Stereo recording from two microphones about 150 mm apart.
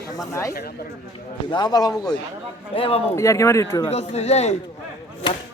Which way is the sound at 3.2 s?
20° left (ahead or behind).